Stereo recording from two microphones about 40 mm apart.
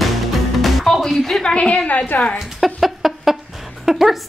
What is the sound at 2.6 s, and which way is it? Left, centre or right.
Chicken, centre.